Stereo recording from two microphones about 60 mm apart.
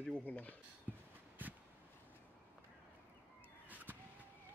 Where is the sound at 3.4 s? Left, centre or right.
Right.